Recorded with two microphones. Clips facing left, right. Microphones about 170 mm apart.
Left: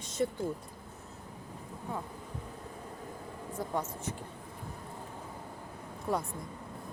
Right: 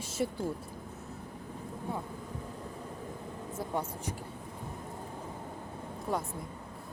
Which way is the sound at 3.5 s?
10° right (ahead or behind).